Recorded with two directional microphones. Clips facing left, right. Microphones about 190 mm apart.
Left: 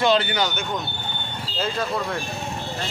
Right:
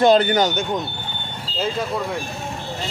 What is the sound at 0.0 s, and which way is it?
Speech, 45° right (ahead or behind).